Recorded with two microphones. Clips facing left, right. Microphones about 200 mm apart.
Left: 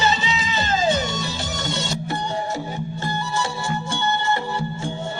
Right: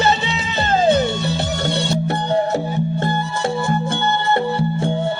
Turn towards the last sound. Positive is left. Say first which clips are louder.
# right 4 dB
turn(degrees=-55)  # may be behind; listen again after turning